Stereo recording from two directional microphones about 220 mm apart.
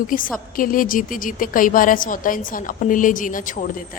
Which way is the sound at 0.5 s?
40° left (ahead or behind).